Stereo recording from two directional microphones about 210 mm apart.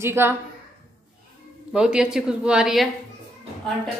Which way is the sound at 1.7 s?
5° right (ahead or behind).